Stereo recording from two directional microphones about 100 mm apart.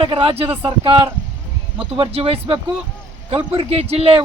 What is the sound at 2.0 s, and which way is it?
Speech, 70° right (ahead or behind).